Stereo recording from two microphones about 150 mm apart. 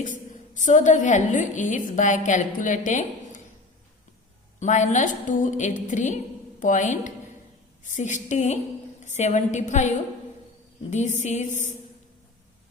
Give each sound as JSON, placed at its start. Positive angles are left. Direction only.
{"t": 0.0, "sound": "a woman's voice", "side_deg": 60}
{"t": 4.6, "sound": "a woman's voice", "side_deg": 55}
{"t": 10.9, "sound": "a woman's voice", "side_deg": 50}